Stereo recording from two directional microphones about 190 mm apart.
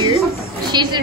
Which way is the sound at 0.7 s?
25° right (ahead or behind).